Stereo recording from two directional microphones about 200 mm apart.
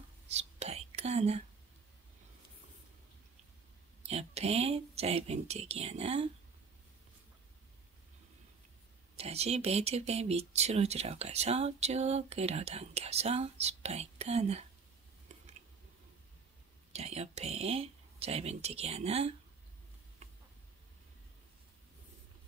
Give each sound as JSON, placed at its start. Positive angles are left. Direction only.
{"t": 0.3, "sound": "whispering", "side_deg": -35}
{"t": 4.0, "sound": "speech", "side_deg": -30}
{"t": 9.1, "sound": "speech", "side_deg": -30}
{"t": 15.3, "sound": "a sound", "side_deg": -35}
{"t": 16.9, "sound": "speech", "side_deg": -30}